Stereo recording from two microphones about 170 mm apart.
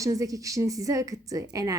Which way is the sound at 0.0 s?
20° right (ahead or behind).